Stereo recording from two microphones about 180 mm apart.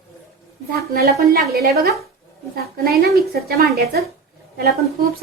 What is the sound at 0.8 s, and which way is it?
Speech, 55° right (ahead or behind).